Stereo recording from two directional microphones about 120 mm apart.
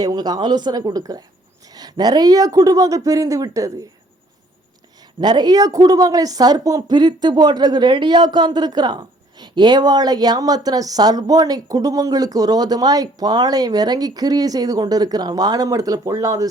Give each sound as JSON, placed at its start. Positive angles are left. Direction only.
{"t": 0.0, "sound": "speech", "side_deg": -35}
{"t": 5.2, "sound": "speech", "side_deg": -35}